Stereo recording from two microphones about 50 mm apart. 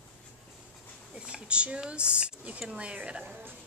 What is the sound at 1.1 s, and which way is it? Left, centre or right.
Speech, right.